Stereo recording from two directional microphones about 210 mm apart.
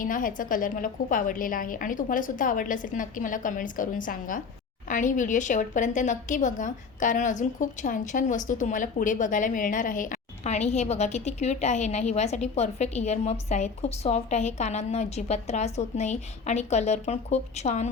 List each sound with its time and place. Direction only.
0.0 s a woman's voice: 40° left (ahead or behind)